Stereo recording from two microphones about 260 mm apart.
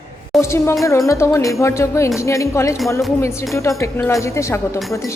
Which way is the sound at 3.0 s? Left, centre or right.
Centre.